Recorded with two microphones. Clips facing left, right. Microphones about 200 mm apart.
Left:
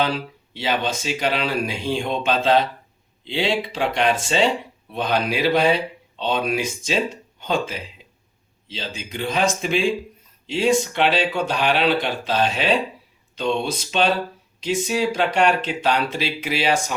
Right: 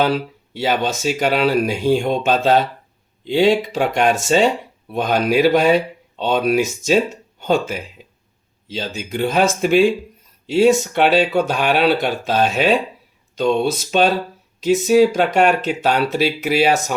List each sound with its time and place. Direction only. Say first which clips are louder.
0.0 s speech: right 5 dB; 45° right (ahead or behind)